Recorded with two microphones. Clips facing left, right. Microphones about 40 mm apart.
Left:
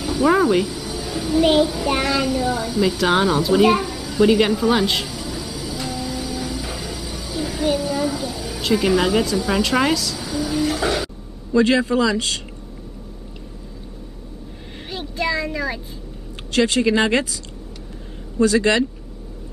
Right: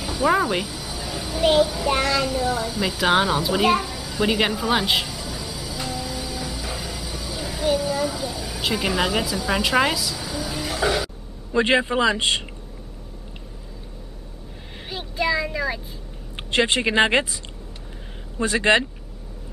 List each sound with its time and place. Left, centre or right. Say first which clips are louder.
0.0 s a child's voice: left 4 dB; centre
5.1 s train: left 3 dB; centre
11.5 s a man's voice: left 3 dB; right
14.9 s a sound: even; centre
16.5 s a man's voice: left 2 dB; right
18.4 s a man's voice: left 3 dB; right